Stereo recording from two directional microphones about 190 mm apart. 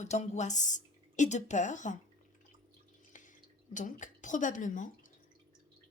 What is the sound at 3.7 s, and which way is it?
A woman's voice, 40° left (ahead or behind).